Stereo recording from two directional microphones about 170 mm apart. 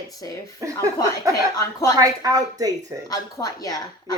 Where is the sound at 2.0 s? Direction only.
20° right (ahead or behind).